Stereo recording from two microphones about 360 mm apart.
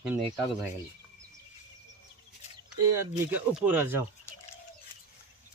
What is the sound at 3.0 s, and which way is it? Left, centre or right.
Speech, centre.